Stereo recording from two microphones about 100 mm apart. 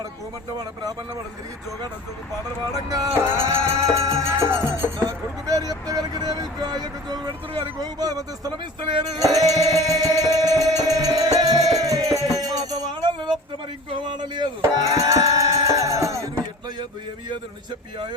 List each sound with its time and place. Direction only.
2.7 s music: 40° right (ahead or behind)
3.1 s music: 25° right (ahead or behind); by 13.3 s 50° right (ahead or behind)
14.0 s a sound: 50° right (ahead or behind)
14.6 s music: 35° right (ahead or behind)